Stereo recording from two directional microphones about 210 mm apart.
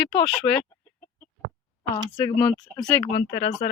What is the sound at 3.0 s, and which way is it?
Speech, 30° left (ahead or behind).